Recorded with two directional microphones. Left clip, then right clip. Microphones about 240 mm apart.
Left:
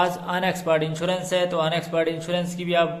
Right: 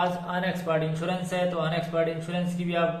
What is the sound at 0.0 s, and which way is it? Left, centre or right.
A man's voice, left.